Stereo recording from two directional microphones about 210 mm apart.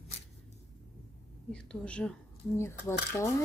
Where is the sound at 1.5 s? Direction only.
5° left (ahead or behind).